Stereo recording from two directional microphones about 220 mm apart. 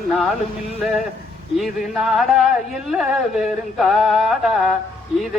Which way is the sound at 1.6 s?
Centre (ahead or behind).